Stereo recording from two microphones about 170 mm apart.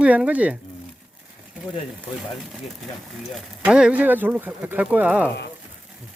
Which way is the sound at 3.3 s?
5° right (ahead or behind).